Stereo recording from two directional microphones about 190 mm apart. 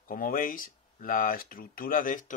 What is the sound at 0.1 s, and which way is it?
Speech, 45° left (ahead or behind).